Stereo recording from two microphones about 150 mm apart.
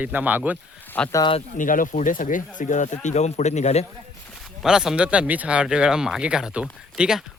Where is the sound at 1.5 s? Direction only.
65° left (ahead or behind); by 3.8 s 45° left (ahead or behind).